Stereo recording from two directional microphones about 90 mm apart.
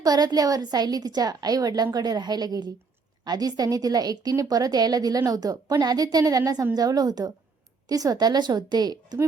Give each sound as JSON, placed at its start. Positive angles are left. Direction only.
{"t": 0.0, "sound": "a woman's voice", "side_deg": -45}